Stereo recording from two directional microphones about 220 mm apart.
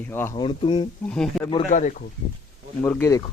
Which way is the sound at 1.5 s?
30° left (ahead or behind).